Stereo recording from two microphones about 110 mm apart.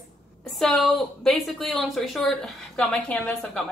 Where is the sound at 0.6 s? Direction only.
Centre (ahead or behind).